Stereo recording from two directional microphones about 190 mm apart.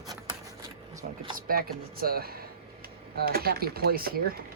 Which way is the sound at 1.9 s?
50° right (ahead or behind).